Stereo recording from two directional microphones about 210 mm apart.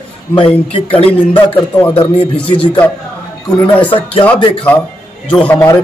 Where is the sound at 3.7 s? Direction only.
25° left (ahead or behind).